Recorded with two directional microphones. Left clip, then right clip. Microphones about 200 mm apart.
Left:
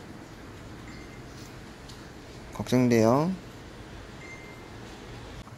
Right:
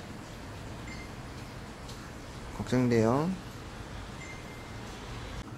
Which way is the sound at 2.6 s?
25° left (ahead or behind).